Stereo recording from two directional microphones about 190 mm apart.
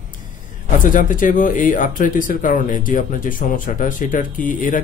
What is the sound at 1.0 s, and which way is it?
A man's voice, 45° left (ahead or behind).